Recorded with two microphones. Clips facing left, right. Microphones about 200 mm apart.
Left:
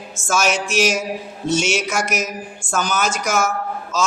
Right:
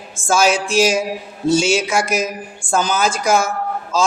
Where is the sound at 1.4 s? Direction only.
30° right (ahead or behind).